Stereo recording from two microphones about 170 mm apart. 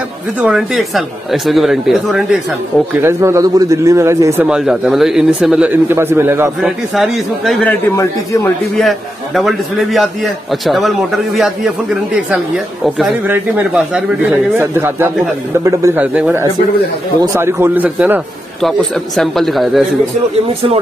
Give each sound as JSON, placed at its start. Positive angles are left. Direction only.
{"t": 0.4, "sound": "a man's voice", "side_deg": -5}
{"t": 2.9, "sound": "speech", "side_deg": -15}
{"t": 6.6, "sound": "a man's voice", "side_deg": 0}
{"t": 7.9, "sound": "a man's voice", "side_deg": 20}
{"t": 8.7, "sound": "a man's voice", "side_deg": 0}
{"t": 14.6, "sound": "speech", "side_deg": -15}
{"t": 18.6, "sound": "a man's voice", "side_deg": 0}
{"t": 20.4, "sound": "speech", "side_deg": -35}